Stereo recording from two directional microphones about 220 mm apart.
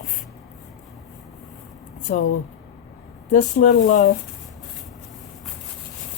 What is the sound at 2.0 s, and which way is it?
Speech, 35° left (ahead or behind).